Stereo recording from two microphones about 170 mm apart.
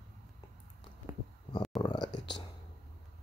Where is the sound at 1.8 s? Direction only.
25° left (ahead or behind).